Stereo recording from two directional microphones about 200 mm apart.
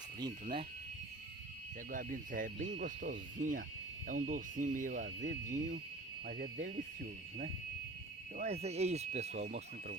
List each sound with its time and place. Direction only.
0.2 s speech: 25° right (ahead or behind)
1.9 s speech: 45° right (ahead or behind)
8.4 s speech: 30° right (ahead or behind)